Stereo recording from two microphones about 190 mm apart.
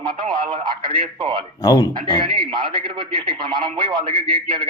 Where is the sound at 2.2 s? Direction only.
25° right (ahead or behind).